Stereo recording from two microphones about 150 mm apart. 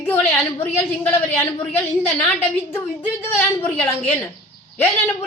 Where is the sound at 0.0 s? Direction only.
15° left (ahead or behind).